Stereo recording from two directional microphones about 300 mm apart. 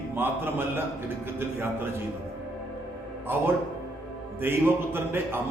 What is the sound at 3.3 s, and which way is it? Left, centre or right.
A man's voice, centre.